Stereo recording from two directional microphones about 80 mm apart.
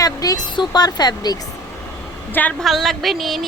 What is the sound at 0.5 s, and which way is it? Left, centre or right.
Speech, left.